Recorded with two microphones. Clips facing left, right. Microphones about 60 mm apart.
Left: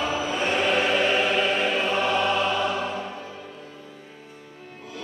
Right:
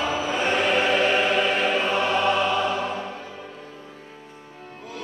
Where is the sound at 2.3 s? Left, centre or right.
Centre.